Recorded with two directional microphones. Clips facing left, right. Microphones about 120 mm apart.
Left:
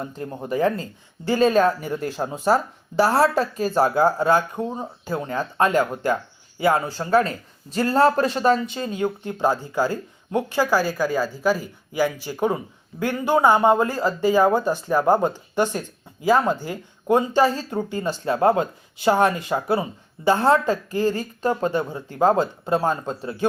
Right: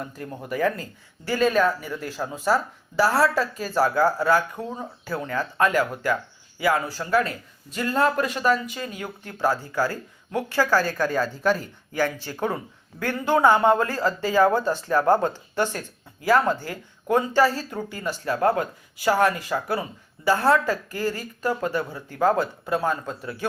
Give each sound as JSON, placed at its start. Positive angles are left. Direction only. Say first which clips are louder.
{"t": 0.0, "sound": "a man's voice", "louder": "left 4 dB", "side_deg": 25}